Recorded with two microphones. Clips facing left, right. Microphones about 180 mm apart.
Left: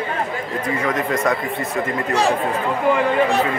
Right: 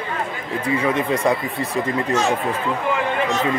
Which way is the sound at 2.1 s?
35° left (ahead or behind).